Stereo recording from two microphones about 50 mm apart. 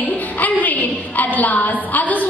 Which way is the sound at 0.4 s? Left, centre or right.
Left.